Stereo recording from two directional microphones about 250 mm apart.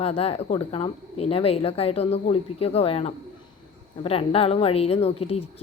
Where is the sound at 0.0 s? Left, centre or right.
Left.